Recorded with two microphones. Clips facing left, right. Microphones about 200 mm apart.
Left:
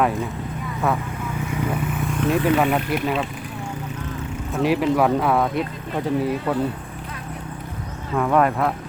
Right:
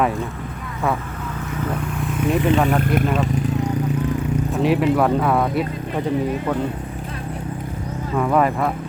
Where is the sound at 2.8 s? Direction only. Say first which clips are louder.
Right 4 dB; 50° right (ahead or behind).